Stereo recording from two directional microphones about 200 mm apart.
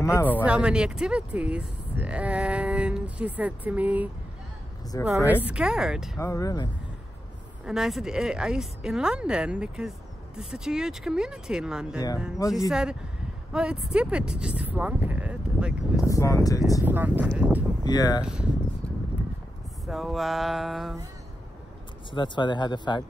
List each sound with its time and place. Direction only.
0.0 s speech: 10° left (ahead or behind)
0.4 s speech: 5° right (ahead or behind)
6.1 s speech: 15° left (ahead or behind)
7.6 s speech: 5° right (ahead or behind)
16.0 s speech: 15° left (ahead or behind)
16.8 s speech: 10° right (ahead or behind)
17.8 s speech: 20° left (ahead or behind)
18.2 s speech: 5° right (ahead or behind)
19.9 s speech: centre (ahead or behind)
22.1 s speech: 25° left (ahead or behind)